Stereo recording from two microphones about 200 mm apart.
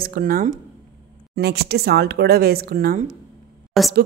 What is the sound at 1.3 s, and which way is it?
Speech, 55° right (ahead or behind).